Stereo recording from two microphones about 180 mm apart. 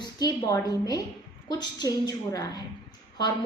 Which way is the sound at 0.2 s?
20° left (ahead or behind).